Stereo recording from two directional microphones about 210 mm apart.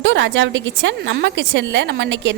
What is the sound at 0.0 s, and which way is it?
A woman's voice, 60° right (ahead or behind).